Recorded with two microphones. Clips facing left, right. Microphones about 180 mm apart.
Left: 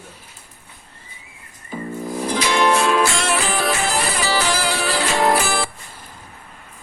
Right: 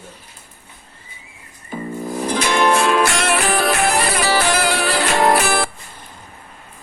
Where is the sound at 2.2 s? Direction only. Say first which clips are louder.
Right 1 dB; 55° right (ahead or behind).